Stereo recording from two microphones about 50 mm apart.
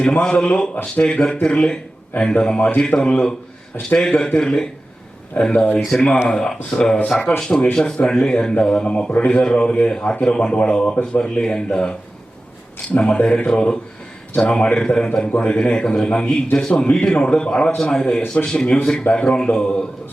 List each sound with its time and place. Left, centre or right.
0.0 s a man's voice: left
4.4 s a man's voice: centre
5.4 s a man's voice: left
5.9 s a man's voice: centre